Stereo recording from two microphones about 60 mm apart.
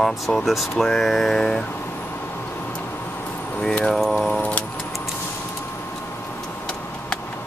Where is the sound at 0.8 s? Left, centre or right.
Centre.